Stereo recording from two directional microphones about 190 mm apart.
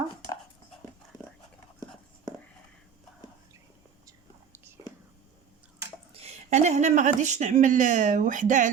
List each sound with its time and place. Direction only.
6.1 s speech: 35° right (ahead or behind)